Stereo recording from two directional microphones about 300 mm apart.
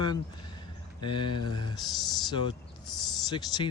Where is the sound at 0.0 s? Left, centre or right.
Centre.